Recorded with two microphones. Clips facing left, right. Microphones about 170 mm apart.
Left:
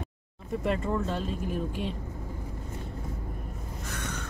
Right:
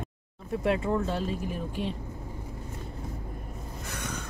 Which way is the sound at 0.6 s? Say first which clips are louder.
Right 2 dB; 5° right (ahead or behind).